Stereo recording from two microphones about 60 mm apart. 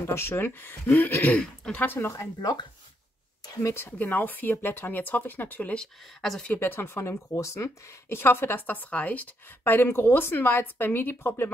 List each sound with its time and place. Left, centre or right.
0.0 s speech: left
1.3 s speech: centre
1.8 s speech: left
3.6 s speech: left
4.0 s speech: left
6.6 s speech: left
7.3 s speech: left